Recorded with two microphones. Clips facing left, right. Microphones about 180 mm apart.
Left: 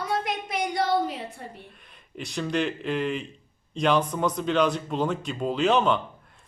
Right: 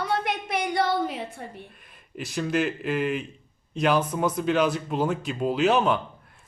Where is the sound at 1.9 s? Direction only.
5° right (ahead or behind).